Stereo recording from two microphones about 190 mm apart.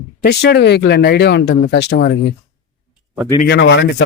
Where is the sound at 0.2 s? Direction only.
60° left (ahead or behind).